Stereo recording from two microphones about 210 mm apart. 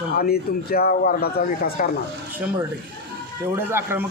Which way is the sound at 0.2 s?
45° left (ahead or behind).